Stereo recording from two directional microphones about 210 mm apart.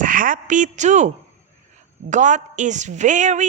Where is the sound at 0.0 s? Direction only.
40° right (ahead or behind).